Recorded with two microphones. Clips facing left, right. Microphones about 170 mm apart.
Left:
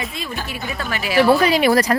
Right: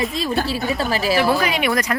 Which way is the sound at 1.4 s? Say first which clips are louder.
Left 5 dB; 35° left (ahead or behind).